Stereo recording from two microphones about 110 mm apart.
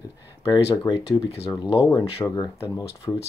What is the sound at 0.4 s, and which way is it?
Speech, 30° left (ahead or behind).